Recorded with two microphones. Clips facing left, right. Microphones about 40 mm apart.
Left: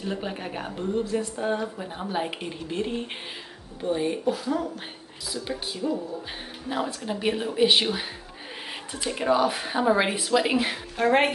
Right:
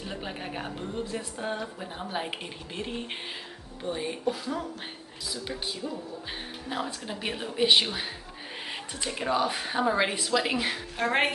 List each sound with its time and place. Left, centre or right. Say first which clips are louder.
0.0 s a woman's voice: left 5 dB; centre
5.8 s speech: left 11 dB; centre
7.1 s a woman's voice: left 7 dB; centre
9.1 s a woman's voice: left 5 dB; centre